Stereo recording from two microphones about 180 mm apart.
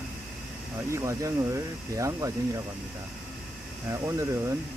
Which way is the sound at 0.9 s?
15° right (ahead or behind).